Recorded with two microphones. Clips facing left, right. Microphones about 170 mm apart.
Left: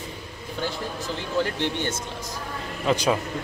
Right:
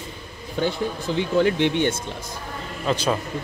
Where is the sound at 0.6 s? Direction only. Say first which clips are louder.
Right 6 dB; 60° right (ahead or behind).